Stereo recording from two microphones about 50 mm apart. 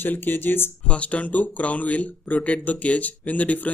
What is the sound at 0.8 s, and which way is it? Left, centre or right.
Speech, left.